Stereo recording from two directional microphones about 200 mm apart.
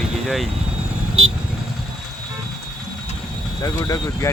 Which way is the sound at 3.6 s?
15° left (ahead or behind).